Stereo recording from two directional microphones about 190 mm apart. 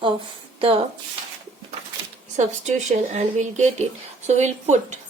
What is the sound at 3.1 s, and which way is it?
Speech, 40° right (ahead or behind).